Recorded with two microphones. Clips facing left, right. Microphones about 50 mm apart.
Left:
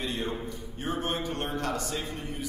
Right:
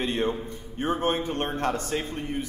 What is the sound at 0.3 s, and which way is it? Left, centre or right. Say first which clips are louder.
A man's voice: right 4 dB; right.